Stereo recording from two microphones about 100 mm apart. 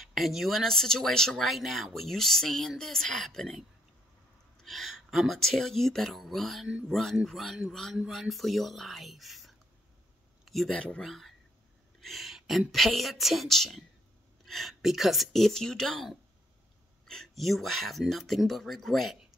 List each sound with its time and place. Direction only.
0.0 s speech: centre (ahead or behind)
10.4 s a sound: centre (ahead or behind)
10.7 s speech: 10° left (ahead or behind)